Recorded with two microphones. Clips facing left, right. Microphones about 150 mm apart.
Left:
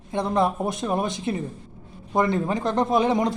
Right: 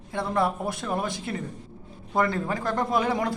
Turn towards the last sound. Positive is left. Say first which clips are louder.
# left 4 dB
turn(degrees=20)  # may be behind; listen again after turning